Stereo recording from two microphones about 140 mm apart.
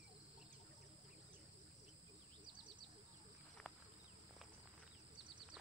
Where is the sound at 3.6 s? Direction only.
10° left (ahead or behind).